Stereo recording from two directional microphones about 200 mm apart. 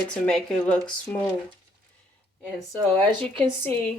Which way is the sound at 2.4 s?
5° left (ahead or behind).